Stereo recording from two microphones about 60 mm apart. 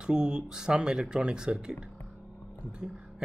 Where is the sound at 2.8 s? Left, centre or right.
Right.